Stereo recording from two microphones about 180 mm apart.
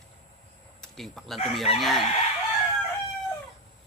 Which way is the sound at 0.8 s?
Centre (ahead or behind).